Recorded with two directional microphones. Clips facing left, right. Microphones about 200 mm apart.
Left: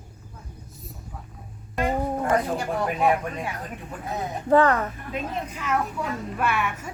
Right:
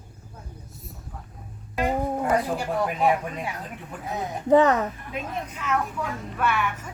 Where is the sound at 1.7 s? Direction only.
10° right (ahead or behind).